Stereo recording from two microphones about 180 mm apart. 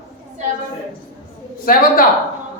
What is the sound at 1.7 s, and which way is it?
Speech, 55° left (ahead or behind).